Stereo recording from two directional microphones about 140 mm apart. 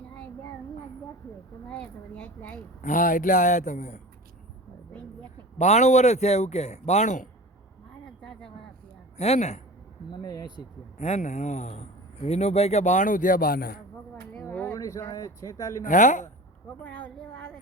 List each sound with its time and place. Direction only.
1.6 s speech: 5° left (ahead or behind)
2.8 s speech: 70° left (ahead or behind)
5.5 s a man's voice: 55° left (ahead or behind)
8.0 s a sound: 5° left (ahead or behind)
9.1 s speech: 50° left (ahead or behind)
10.1 s speech: 30° left (ahead or behind)
11.0 s speech: 55° left (ahead or behind); by 13.8 s 90° left
14.5 s a sound: 10° left (ahead or behind)
14.8 s speech: 20° left (ahead or behind)
15.8 s a man's voice: 65° left (ahead or behind)
16.8 s speech: 10° left (ahead or behind)